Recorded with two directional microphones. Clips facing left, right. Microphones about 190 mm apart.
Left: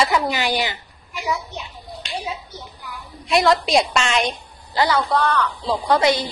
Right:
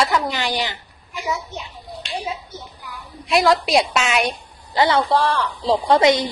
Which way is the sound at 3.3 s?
Centre (ahead or behind).